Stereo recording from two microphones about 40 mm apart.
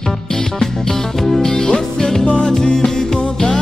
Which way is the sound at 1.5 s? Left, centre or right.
Centre.